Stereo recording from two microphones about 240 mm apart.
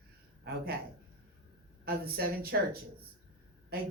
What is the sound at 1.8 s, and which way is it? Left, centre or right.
Speech, right.